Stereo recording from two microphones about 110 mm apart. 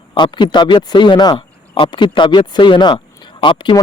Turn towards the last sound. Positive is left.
turn(degrees=45)  # may be behind; listen again after turning